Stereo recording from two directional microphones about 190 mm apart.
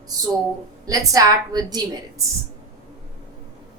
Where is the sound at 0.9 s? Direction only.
20° right (ahead or behind).